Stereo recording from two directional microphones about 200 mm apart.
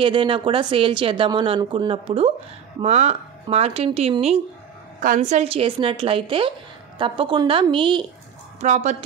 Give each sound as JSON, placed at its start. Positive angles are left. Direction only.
{"t": 0.0, "sound": "speech", "side_deg": -25}
{"t": 8.5, "sound": "speech", "side_deg": -35}